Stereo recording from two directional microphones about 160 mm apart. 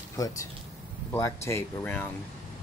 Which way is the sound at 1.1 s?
15° left (ahead or behind).